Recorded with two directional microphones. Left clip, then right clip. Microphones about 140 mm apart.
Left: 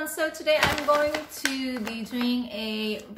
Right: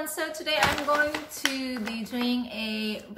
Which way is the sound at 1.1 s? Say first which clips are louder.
Left 1 dB; 20° left (ahead or behind).